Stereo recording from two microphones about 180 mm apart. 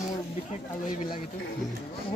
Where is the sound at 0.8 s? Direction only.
45° left (ahead or behind).